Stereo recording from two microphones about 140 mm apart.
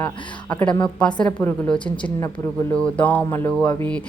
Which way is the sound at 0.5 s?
10° left (ahead or behind).